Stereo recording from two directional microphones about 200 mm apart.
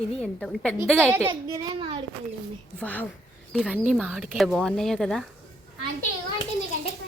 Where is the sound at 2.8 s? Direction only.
10° left (ahead or behind).